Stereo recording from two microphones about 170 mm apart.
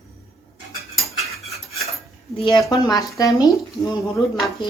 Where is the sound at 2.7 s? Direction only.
20° left (ahead or behind).